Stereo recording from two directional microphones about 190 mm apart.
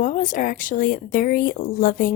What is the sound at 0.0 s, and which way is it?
Speech, 45° left (ahead or behind).